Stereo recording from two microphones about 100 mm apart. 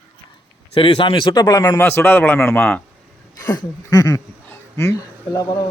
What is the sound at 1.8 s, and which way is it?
A man's voice, 20° left (ahead or behind).